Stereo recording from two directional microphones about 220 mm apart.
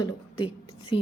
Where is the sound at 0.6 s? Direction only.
25° left (ahead or behind).